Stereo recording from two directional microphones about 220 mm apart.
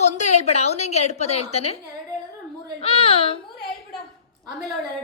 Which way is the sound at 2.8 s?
25° left (ahead or behind).